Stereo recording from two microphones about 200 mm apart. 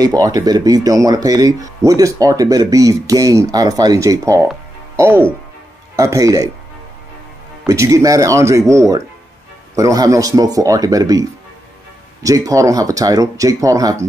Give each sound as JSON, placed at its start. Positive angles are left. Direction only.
{"t": 0.0, "sound": "speech", "side_deg": -20}
{"t": 7.6, "sound": "speech", "side_deg": -15}